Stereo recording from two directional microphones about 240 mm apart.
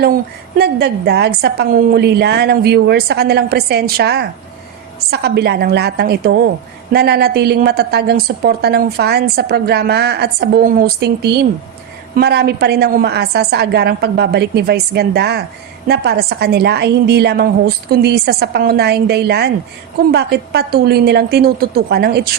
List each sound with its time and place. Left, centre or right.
0.0 s a woman's voice: right